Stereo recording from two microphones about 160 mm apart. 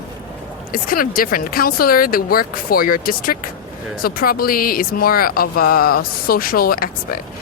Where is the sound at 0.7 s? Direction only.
65° left (ahead or behind).